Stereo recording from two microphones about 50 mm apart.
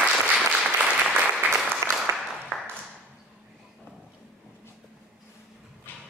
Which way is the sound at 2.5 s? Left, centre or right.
Right.